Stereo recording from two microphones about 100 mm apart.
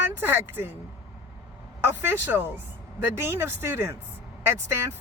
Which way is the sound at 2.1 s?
20° right (ahead or behind).